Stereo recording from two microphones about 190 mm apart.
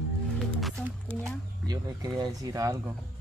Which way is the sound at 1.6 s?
20° right (ahead or behind).